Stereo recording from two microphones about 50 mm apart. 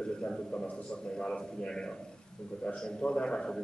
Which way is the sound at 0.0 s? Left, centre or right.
Centre.